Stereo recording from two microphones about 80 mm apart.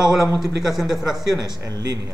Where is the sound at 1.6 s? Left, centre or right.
Right.